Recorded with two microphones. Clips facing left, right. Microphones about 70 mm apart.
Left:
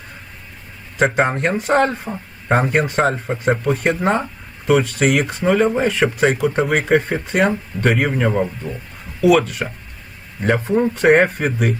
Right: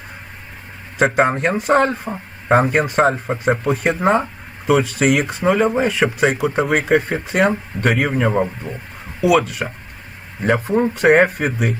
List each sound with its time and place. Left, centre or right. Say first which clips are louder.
0.9 s speech: right 1 dB; centre
8.7 s speech: left 1 dB; right
9.2 s speech: left 1 dB; centre